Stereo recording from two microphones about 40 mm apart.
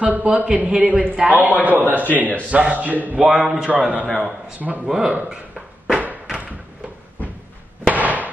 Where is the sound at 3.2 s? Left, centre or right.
Centre.